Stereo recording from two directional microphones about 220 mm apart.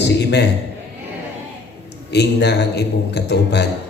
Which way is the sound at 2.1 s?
50° left (ahead or behind).